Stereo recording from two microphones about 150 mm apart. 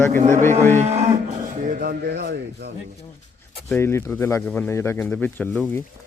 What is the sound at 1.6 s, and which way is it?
Speech, 65° right (ahead or behind).